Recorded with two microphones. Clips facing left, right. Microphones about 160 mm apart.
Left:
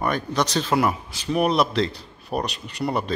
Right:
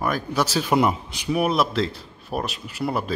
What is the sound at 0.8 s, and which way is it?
Speech, 20° right (ahead or behind).